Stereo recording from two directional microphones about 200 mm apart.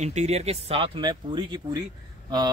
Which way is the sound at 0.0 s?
35° right (ahead or behind).